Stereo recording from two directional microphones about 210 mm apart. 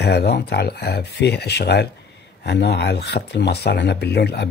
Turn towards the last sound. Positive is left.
turn(degrees=55)  # may be behind; listen again after turning